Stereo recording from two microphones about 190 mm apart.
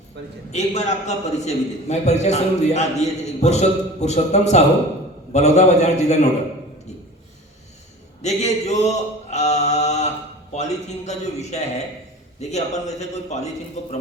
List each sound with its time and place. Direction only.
0.5 s a man's voice: 35° left (ahead or behind)
8.2 s a man's voice: 35° left (ahead or behind)